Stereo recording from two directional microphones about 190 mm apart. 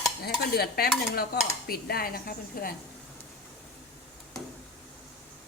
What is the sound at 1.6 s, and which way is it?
A woman's voice, 55° left (ahead or behind).